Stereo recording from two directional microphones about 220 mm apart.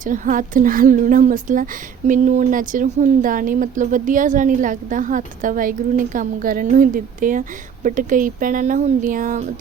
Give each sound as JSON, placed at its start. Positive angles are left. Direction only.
{"t": 0.0, "sound": "speech", "side_deg": -35}